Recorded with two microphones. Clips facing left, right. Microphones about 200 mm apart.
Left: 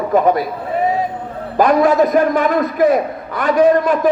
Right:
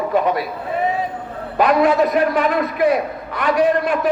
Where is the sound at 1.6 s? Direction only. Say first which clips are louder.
Left 3 dB; 40° left (ahead or behind).